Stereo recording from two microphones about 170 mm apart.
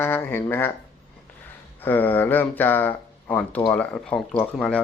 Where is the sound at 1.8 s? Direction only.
10° left (ahead or behind).